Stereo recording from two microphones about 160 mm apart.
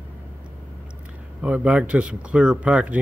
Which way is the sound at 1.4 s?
10° right (ahead or behind).